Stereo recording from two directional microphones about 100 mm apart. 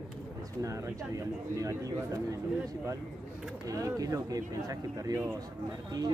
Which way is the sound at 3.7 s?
35° right (ahead or behind).